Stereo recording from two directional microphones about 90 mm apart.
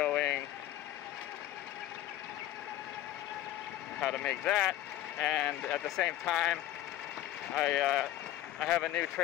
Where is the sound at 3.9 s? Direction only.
10° left (ahead or behind).